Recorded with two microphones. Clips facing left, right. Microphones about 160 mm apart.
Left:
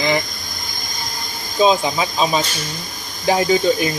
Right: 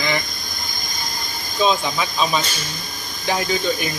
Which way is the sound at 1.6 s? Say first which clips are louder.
Left 4 dB; 30° left (ahead or behind).